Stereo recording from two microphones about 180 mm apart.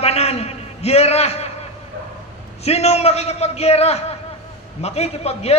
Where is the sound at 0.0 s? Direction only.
35° left (ahead or behind).